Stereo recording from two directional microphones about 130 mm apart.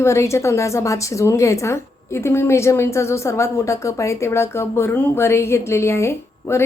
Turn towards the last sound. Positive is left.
turn(degrees=20)  # may be behind; listen again after turning